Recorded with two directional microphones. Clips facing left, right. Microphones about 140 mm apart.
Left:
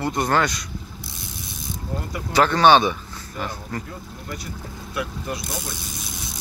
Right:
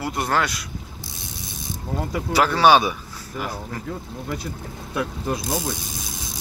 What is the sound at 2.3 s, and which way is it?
Speech, 5° right (ahead or behind).